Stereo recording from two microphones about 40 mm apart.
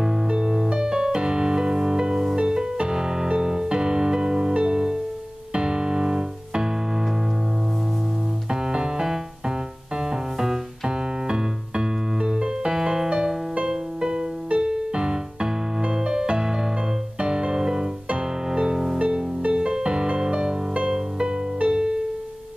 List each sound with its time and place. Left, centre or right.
0.3 s music: centre
8.5 s music: centre
18.9 s music: right